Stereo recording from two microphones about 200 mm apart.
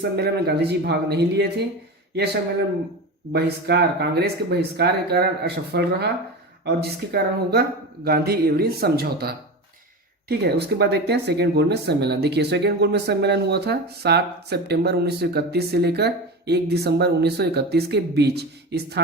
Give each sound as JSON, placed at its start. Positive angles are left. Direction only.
{"t": 0.0, "sound": "speech", "side_deg": -55}
{"t": 3.3, "sound": "speech", "side_deg": -55}